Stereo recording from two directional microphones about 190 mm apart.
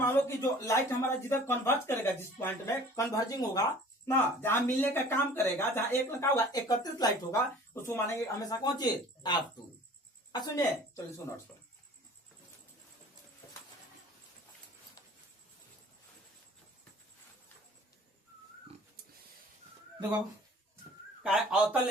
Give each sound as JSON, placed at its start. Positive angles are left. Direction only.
{"t": 0.0, "sound": "a woman's voice", "side_deg": 15}
{"t": 21.2, "sound": "a man's voice", "side_deg": -5}